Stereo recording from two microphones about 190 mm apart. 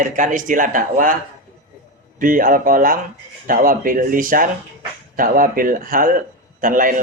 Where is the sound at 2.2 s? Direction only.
45° right (ahead or behind).